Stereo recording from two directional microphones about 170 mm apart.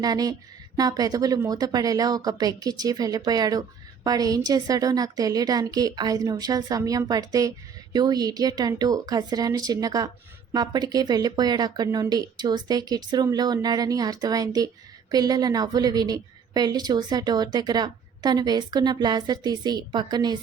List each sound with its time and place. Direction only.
0.0 s a woman's voice: 20° right (ahead or behind)